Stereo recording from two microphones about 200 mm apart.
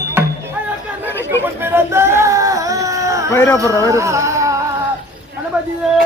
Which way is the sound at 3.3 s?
10° left (ahead or behind).